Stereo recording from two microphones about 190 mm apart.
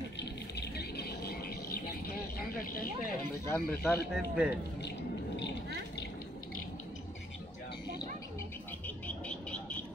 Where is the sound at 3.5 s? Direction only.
10° left (ahead or behind).